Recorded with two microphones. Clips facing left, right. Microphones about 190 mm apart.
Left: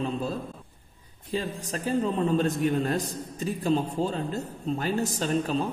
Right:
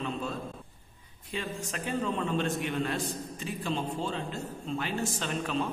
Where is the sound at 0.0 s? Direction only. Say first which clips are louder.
Left 5 dB; 35° left (ahead or behind).